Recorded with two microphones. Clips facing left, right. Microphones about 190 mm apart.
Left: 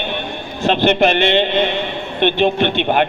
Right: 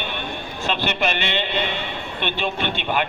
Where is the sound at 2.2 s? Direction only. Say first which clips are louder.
Left 11 dB; 55° left (ahead or behind).